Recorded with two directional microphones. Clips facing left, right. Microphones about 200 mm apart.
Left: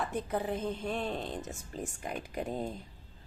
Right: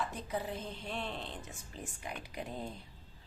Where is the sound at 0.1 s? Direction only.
55° left (ahead or behind).